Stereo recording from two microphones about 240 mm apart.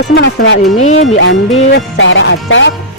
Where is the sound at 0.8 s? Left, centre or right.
Left.